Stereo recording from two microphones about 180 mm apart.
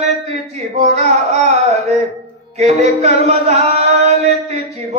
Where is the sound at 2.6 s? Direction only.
35° right (ahead or behind).